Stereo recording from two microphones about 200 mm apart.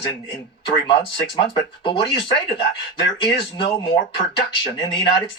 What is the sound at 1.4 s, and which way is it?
Speech, 25° left (ahead or behind).